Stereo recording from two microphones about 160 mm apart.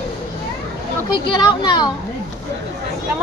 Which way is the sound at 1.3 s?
25° left (ahead or behind).